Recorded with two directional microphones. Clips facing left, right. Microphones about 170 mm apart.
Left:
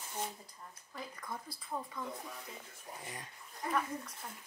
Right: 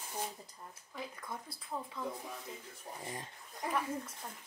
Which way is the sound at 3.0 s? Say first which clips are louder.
Right 4 dB; 30° right (ahead or behind).